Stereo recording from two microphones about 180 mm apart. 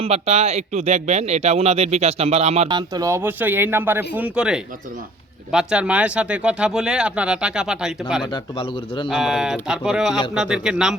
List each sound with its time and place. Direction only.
0.0 s speech: 35° right (ahead or behind); by 7.9 s 5° right (ahead or behind)
8.2 s speech: 25° left (ahead or behind)
9.0 s speech: centre (ahead or behind)